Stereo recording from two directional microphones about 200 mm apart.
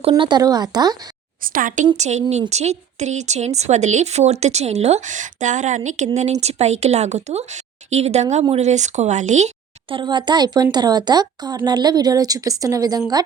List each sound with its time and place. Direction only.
0.1 s speech: 20° right (ahead or behind)
1.4 s speech: 45° right (ahead or behind)
9.9 s speech: 25° right (ahead or behind)